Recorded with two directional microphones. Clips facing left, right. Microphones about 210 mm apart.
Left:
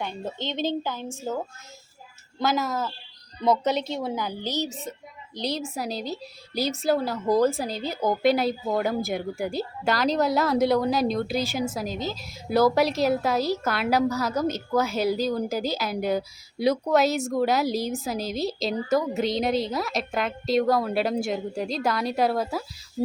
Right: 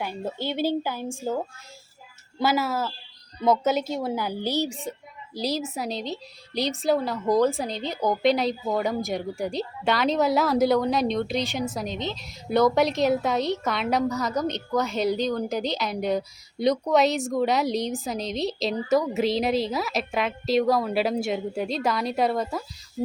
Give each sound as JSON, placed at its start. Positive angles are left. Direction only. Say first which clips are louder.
{"t": 0.0, "sound": "a woman's voice", "louder": "right 2 dB", "side_deg": -10}
{"t": 2.4, "sound": "a woman's voice", "louder": "right 1 dB", "side_deg": -10}